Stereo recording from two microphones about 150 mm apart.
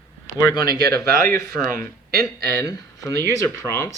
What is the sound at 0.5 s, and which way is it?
Speech, 25° left (ahead or behind).